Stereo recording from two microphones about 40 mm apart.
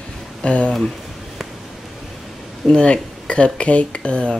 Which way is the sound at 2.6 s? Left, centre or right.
Left.